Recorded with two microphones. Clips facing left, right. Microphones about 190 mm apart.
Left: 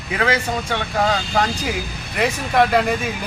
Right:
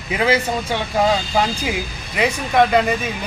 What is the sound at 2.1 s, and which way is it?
Speech, centre (ahead or behind).